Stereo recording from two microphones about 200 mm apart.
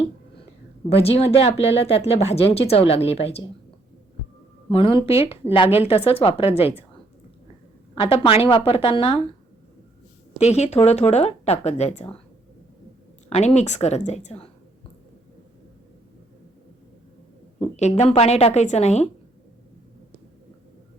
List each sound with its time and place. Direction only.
0.9 s speech: 30° left (ahead or behind)
4.7 s speech: 25° left (ahead or behind)
4.9 s speech: 15° right (ahead or behind)
5.3 s speech: 25° left (ahead or behind)
7.9 s speech: 25° left (ahead or behind)
10.3 s speech: 35° left (ahead or behind)
13.3 s speech: 35° left (ahead or behind)
17.6 s speech: 35° left (ahead or behind)